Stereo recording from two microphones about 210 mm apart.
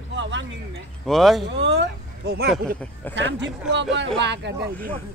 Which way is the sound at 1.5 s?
55° right (ahead or behind).